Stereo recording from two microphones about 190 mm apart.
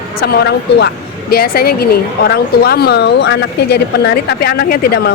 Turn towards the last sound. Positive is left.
turn(degrees=55)  # may be behind; listen again after turning